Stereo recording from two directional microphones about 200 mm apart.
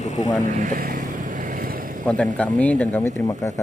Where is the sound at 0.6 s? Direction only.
40° right (ahead or behind).